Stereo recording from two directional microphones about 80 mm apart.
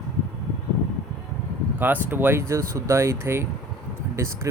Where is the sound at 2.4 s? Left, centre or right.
Right.